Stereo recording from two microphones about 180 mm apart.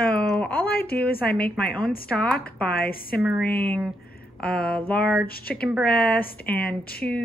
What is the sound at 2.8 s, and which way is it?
Speech, 55° left (ahead or behind).